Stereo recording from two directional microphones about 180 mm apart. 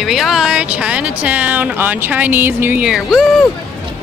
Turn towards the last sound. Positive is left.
turn(degrees=0)  # may be behind; listen again after turning